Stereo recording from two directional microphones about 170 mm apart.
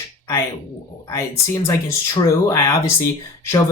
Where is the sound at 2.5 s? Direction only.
15° left (ahead or behind).